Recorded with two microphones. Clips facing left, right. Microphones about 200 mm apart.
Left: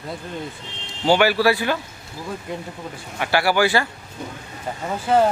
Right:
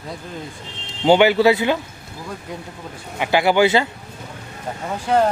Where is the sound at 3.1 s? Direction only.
20° right (ahead or behind).